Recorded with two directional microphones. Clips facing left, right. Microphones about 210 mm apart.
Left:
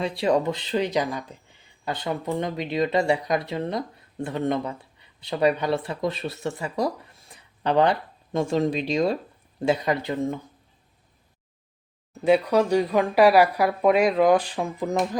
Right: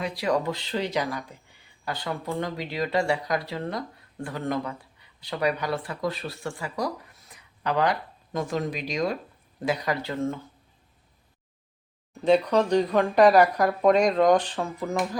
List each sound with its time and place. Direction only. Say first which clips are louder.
0.2 s speech: left 4 dB; 25° left (ahead or behind)
12.2 s speech: left 1 dB; 10° left (ahead or behind)